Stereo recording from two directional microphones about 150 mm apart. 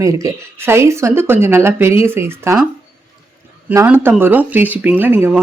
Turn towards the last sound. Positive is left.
turn(degrees=-15)  # may be behind; listen again after turning